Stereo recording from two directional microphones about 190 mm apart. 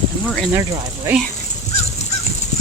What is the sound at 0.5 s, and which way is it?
Speech, 15° right (ahead or behind).